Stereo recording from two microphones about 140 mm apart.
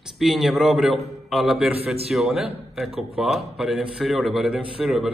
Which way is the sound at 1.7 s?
45° right (ahead or behind).